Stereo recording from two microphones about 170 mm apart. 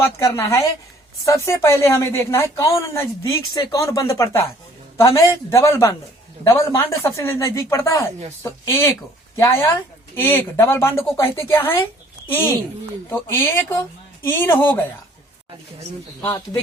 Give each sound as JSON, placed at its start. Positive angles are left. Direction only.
{"t": 0.0, "sound": "speech", "side_deg": 20}
{"t": 13.1, "sound": "speech", "side_deg": 15}
{"t": 16.2, "sound": "speech", "side_deg": 15}